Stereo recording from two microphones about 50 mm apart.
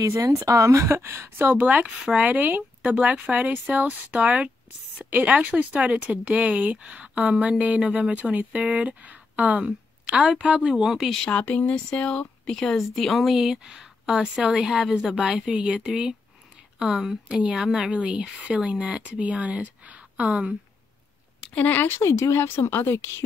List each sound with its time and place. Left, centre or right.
0.0 s speech: right
0.8 s speech: right
1.4 s speech: right
2.8 s a woman's voice: right
10.1 s speech: centre
10.9 s speech: centre
11.2 s speech: left; by 12.7 s centre
12.7 s speech: centre; by 20.4 s right
21.7 s speech: left
22.0 s speech: left
22.4 s speech: left